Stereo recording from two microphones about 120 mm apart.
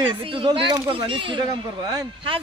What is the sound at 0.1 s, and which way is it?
A man's voice, 45° right (ahead or behind).